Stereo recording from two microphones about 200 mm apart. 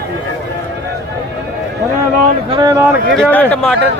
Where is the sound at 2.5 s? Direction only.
20° right (ahead or behind).